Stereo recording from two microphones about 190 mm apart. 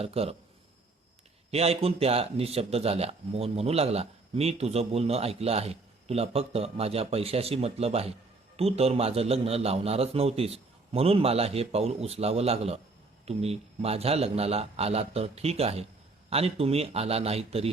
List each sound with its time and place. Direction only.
0.0 s a man's voice: 30° right (ahead or behind)
1.5 s a man's voice: 30° right (ahead or behind)